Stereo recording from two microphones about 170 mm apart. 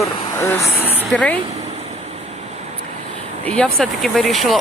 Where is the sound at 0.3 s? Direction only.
15° left (ahead or behind).